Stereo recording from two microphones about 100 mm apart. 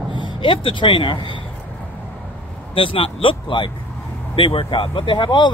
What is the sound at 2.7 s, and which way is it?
Speech, 65° left (ahead or behind).